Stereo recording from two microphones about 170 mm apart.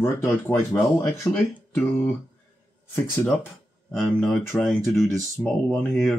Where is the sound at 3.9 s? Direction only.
5° left (ahead or behind).